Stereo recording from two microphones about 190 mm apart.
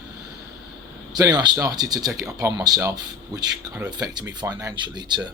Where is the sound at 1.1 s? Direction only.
20° right (ahead or behind).